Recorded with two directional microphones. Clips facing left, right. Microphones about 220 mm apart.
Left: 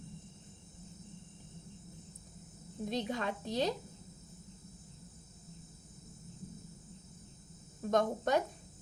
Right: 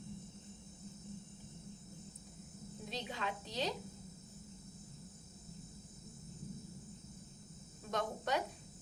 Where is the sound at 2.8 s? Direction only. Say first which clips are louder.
Left 7 dB; 50° left (ahead or behind).